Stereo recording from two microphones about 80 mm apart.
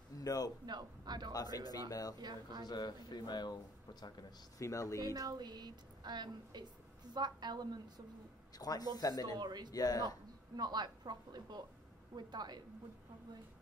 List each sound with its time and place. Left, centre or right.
0.2 s a man's voice: left
0.7 s a woman's voice: right
1.3 s speech: left
2.1 s a woman's voice: right
2.6 s speech: left
4.6 s speech: left
5.0 s a woman's voice: right
8.5 s speech: left
9.4 s a woman's voice: right
9.7 s speech: left
10.0 s a woman's voice: right